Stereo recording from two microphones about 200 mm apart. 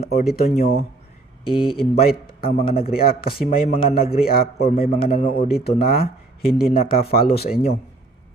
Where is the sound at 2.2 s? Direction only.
50° left (ahead or behind).